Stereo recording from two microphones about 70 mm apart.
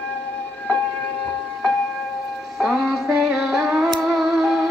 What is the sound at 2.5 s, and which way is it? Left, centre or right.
Music, centre.